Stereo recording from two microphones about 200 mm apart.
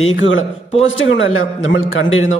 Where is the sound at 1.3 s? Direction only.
85° left.